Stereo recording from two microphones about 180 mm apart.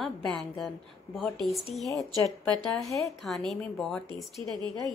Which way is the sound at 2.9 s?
15° left (ahead or behind).